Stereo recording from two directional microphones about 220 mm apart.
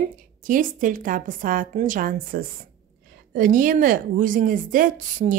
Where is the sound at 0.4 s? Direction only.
35° right (ahead or behind).